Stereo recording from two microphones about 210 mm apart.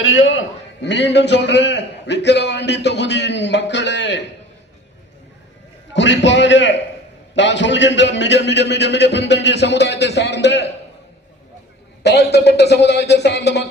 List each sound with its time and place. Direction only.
0.0 s a man's voice: 75° left (ahead or behind); by 4.2 s 55° left (ahead or behind)
5.9 s a man's voice: 60° left (ahead or behind)
12.0 s speech: 50° left (ahead or behind)